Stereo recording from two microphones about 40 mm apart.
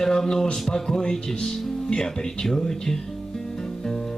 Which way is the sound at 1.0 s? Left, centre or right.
Left.